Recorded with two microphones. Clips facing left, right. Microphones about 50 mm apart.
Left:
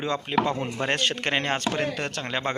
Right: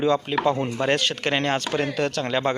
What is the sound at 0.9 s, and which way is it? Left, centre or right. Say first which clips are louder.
Speech: right 1 dB; left.